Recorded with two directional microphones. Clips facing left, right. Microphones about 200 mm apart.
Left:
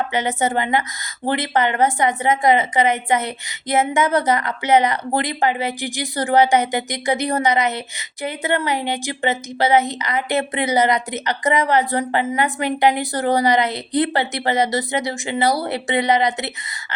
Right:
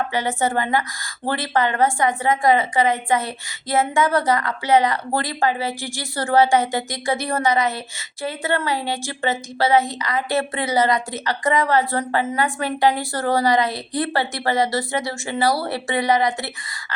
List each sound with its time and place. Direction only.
0.1 s a woman's voice: 20° left (ahead or behind)